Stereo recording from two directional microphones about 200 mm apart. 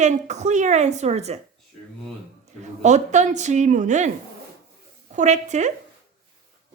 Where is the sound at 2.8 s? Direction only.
35° right (ahead or behind).